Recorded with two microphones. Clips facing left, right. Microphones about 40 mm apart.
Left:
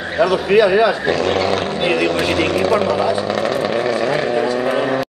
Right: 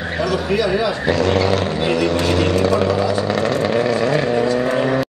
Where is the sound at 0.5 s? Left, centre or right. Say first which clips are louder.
Left 7 dB; left.